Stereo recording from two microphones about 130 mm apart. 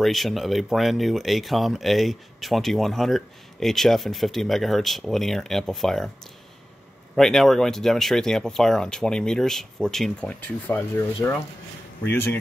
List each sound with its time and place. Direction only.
0.0 s speech: centre (ahead or behind)
7.2 s speech: centre (ahead or behind)
10.4 s speech: 15° left (ahead or behind)